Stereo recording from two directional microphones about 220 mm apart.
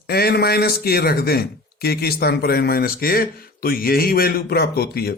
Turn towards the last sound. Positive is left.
turn(degrees=45)  # may be behind; listen again after turning